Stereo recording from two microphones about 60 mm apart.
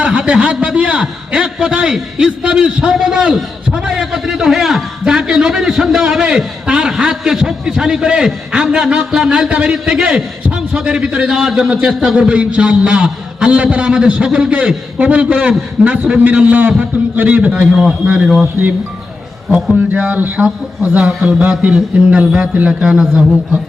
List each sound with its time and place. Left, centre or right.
0.0 s a man's voice: centre
12.3 s a man's voice: centre
14.9 s a man's voice: right
19.7 s a man's voice: right
20.4 s a man's voice: centre
22.9 s a man's voice: centre